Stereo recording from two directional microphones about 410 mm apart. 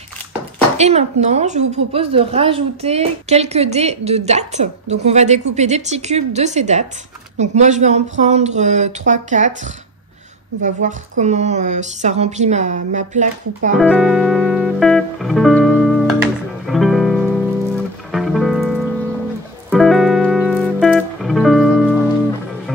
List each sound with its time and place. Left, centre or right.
0.7 s a woman's voice: centre
10.6 s a woman's voice: centre
13.7 s music: centre